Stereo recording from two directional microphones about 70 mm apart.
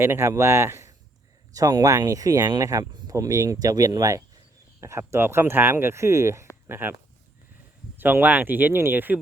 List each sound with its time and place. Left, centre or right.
0.0 s speech: right
1.5 s speech: right
4.8 s speech: right
7.9 s speech: right